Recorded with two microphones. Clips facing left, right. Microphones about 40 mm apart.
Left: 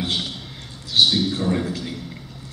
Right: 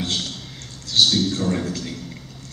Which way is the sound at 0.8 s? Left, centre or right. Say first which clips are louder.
Even; centre.